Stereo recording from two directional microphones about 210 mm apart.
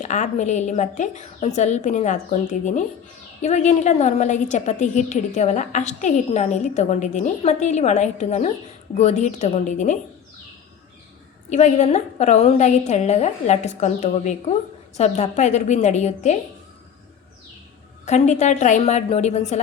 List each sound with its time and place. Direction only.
0.0 s a woman's voice: 35° left (ahead or behind)
11.4 s a woman's voice: 35° left (ahead or behind)
18.0 s a woman's voice: 35° left (ahead or behind)